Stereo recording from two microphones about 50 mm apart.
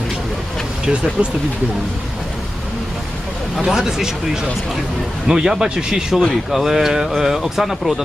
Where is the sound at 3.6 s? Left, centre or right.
Centre.